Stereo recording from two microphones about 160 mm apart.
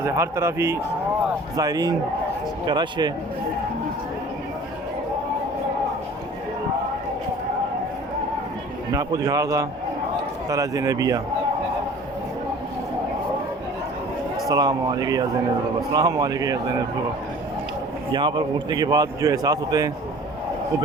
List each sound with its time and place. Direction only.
0.0 s a man's voice: 15° right (ahead or behind)
8.9 s a man's voice: 20° right (ahead or behind)
14.4 s a man's voice: 25° right (ahead or behind)
18.1 s a man's voice: 30° right (ahead or behind)